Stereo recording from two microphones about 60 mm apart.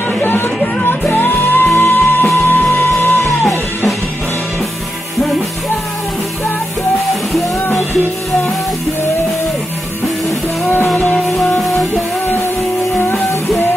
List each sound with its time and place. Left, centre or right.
0.2 s music: left